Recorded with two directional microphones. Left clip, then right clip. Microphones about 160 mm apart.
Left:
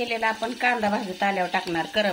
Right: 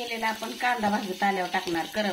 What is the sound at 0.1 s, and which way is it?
Speech, 40° left (ahead or behind).